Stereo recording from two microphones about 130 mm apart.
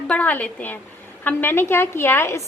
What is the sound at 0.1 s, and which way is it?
A woman's voice, 10° left (ahead or behind).